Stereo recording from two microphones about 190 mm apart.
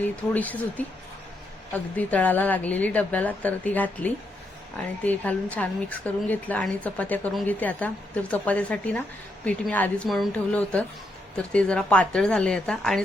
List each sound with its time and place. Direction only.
0.0 s a woman's voice: 10° left (ahead or behind)